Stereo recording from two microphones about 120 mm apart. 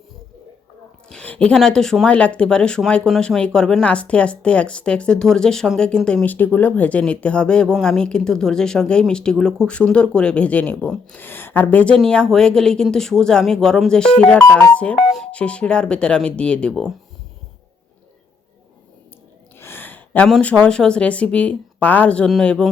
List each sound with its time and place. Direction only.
1.1 s speech: 10° left (ahead or behind)
6.2 s speech: 15° left (ahead or behind)
19.5 s gasp: 20° left (ahead or behind)
20.4 s speech: 10° left (ahead or behind)